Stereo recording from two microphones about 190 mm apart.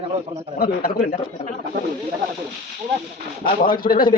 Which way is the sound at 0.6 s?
50° left (ahead or behind).